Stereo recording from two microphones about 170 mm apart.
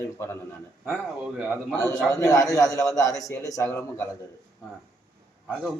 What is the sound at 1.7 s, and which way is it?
A man's voice, 20° left (ahead or behind).